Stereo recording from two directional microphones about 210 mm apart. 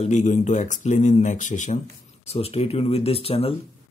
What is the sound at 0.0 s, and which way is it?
Speech, 35° left (ahead or behind).